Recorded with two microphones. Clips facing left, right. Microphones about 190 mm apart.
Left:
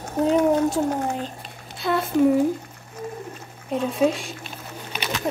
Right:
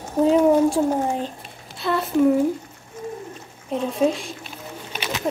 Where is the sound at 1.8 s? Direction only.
Centre (ahead or behind).